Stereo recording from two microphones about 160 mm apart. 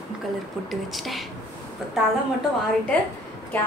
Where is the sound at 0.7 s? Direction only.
Centre (ahead or behind).